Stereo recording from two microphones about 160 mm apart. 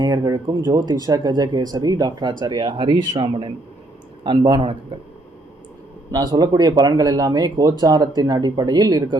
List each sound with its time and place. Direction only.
0.0 s a man's voice: 25° right (ahead or behind)
6.1 s speech: 25° right (ahead or behind)